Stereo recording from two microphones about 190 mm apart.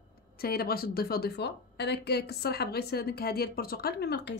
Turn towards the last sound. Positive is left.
turn(degrees=60)  # may be behind; listen again after turning